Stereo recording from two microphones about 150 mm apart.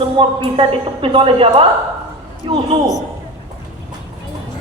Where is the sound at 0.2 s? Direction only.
35° right (ahead or behind).